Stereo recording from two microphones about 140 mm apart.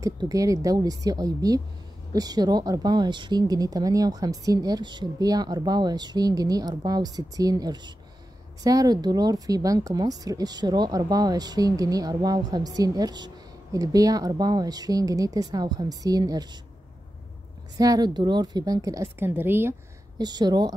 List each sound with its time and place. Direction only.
0.0 s speech: 25° right (ahead or behind)
17.7 s speech: 25° right (ahead or behind)
20.2 s speech: 30° right (ahead or behind)